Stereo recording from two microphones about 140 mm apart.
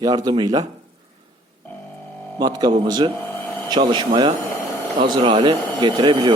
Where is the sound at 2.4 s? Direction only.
30° right (ahead or behind).